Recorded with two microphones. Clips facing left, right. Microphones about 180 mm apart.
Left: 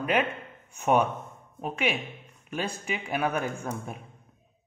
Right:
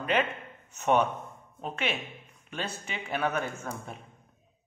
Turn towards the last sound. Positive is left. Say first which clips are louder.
# left 2 dB
turn(degrees=10)  # may be behind; listen again after turning